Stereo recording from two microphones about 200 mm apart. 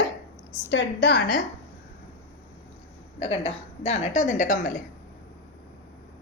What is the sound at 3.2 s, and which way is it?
A woman's voice, 30° left (ahead or behind).